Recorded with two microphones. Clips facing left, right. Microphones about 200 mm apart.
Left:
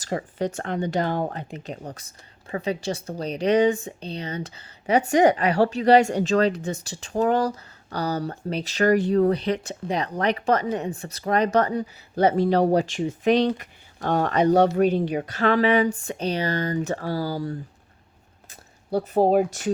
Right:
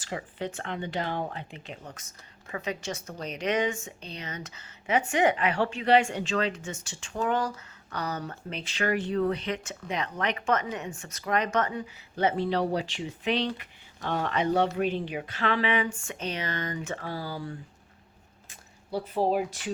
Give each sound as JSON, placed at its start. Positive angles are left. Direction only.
{"t": 0.0, "sound": "speech", "side_deg": 40}
{"t": 18.9, "sound": "speech", "side_deg": 50}